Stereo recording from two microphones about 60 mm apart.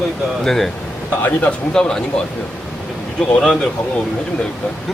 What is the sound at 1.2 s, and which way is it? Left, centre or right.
Speech, left.